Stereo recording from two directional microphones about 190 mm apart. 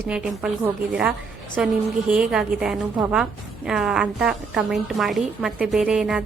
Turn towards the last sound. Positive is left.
turn(degrees=-5)  # may be behind; listen again after turning